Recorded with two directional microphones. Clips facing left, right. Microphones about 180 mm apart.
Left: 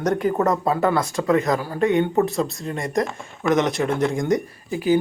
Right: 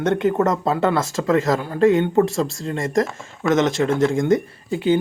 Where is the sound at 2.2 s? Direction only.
90° right.